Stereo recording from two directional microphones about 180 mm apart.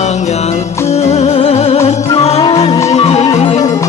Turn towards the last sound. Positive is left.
turn(degrees=35)  # may be behind; listen again after turning